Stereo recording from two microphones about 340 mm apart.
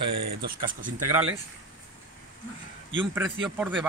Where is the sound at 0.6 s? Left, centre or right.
Right.